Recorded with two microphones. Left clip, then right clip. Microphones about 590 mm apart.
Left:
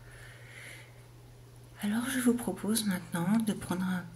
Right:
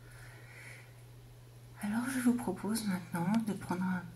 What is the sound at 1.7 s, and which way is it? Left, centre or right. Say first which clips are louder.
Speech: left 3 dB; right.